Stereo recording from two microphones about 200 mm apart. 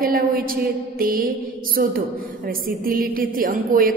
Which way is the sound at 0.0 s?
45° right (ahead or behind).